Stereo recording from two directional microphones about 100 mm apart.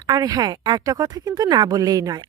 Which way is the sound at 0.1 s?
40° right (ahead or behind).